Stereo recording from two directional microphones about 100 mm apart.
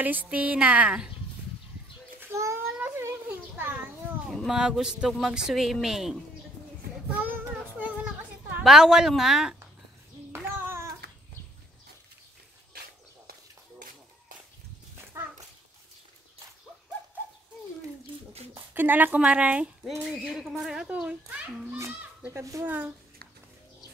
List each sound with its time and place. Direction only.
0.0 s speech: 15° right (ahead or behind)
2.1 s child singing: 25° right (ahead or behind)
2.8 s a sound: 20° right (ahead or behind)
4.3 s speech: 5° right (ahead or behind)
7.1 s child singing: 15° right (ahead or behind)
8.6 s speech: 5° right (ahead or behind)
10.3 s child singing: 25° right (ahead or behind)
15.2 s dog: 25° right (ahead or behind)
18.5 s speech: 20° right (ahead or behind)
22.3 s speech: 30° right (ahead or behind)